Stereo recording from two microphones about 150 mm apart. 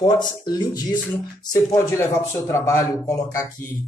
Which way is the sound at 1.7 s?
15° left (ahead or behind).